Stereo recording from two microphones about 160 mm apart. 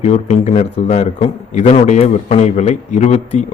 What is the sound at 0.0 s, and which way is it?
A man's voice, 45° left (ahead or behind).